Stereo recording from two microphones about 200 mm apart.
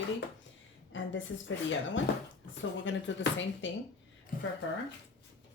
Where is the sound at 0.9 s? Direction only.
70° left (ahead or behind).